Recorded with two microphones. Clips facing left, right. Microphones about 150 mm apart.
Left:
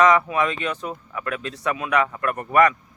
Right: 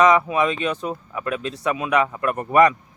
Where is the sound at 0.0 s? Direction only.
15° right (ahead or behind).